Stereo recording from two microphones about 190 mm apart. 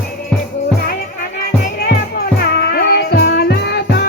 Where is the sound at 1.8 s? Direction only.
55° left (ahead or behind).